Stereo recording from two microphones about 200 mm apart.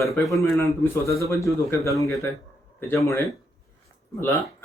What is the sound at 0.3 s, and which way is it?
Speech, centre (ahead or behind).